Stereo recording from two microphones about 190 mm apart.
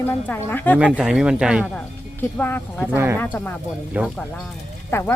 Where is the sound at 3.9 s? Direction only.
5° right (ahead or behind).